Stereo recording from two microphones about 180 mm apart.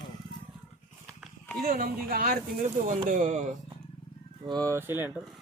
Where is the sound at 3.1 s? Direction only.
45° right (ahead or behind).